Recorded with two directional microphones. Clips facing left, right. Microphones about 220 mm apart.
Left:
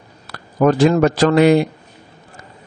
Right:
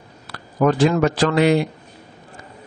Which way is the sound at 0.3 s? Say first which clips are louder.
Left 3 dB; 40° left (ahead or behind).